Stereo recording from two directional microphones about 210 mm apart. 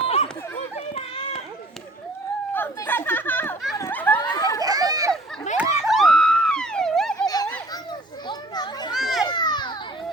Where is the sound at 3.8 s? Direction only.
10° left (ahead or behind).